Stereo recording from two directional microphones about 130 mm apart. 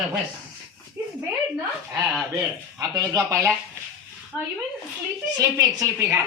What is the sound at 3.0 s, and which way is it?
Speech, 25° right (ahead or behind).